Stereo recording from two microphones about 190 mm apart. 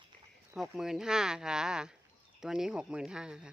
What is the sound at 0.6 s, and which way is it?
Speech, centre (ahead or behind).